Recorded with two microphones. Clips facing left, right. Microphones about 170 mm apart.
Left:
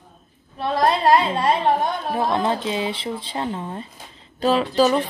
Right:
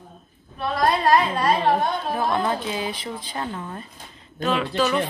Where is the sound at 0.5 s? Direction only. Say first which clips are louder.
Left 2 dB; 30° left (ahead or behind).